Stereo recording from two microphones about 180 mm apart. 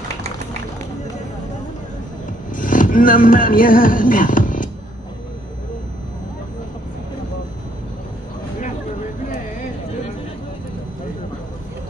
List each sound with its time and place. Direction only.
2.5 s music: 45° left (ahead or behind)